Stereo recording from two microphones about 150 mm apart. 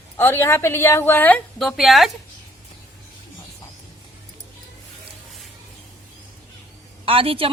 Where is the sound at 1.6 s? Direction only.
Centre (ahead or behind).